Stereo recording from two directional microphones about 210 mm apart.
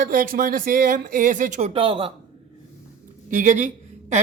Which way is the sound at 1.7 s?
25° right (ahead or behind).